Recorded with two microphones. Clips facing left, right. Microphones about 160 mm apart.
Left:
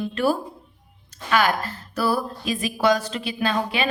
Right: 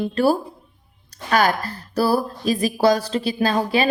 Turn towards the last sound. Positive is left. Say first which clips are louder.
# right 4 dB
turn(degrees=-35)  # may be behind; listen again after turning